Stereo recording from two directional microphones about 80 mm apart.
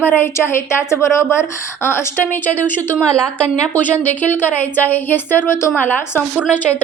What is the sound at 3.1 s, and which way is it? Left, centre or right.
Speech, centre.